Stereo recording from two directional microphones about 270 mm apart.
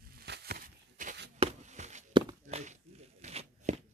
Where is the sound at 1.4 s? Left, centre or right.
Right.